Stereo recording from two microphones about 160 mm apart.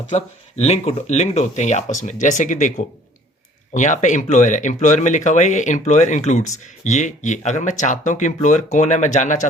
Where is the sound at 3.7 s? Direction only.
50° left (ahead or behind).